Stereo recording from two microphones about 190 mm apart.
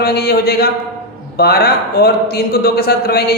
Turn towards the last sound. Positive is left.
turn(degrees=55)  # may be behind; listen again after turning